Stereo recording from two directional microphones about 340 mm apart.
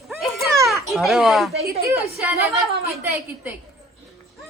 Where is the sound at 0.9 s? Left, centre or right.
Centre.